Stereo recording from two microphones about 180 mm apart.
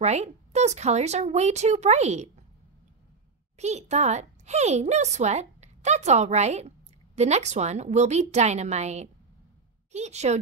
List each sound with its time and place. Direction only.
0.0 s a child's voice: 40° right (ahead or behind)
3.5 s a child's voice: 40° right (ahead or behind)